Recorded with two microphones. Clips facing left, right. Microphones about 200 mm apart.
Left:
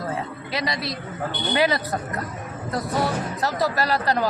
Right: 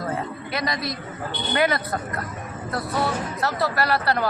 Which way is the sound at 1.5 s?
15° left (ahead or behind).